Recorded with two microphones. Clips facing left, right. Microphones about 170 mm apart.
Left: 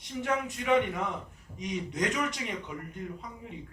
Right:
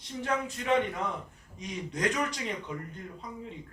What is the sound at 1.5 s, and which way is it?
Speech, 20° left (ahead or behind).